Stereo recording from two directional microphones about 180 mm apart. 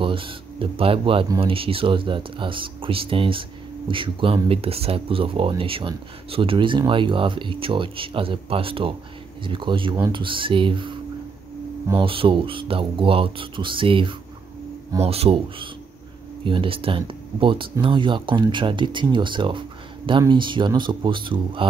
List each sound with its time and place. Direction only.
0.0 s speech: 30° right (ahead or behind)